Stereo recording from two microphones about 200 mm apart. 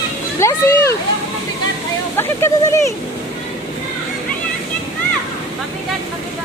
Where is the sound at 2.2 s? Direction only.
15° left (ahead or behind).